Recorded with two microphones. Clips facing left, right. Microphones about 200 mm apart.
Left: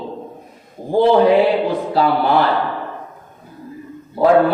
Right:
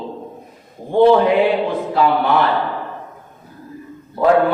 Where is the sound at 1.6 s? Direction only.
35° left (ahead or behind).